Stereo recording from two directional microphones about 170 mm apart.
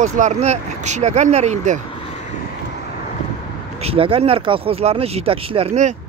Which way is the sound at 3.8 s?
35° right (ahead or behind).